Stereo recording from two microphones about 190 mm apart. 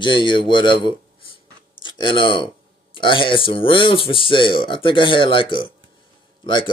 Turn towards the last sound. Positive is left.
turn(degrees=25)  # may be behind; listen again after turning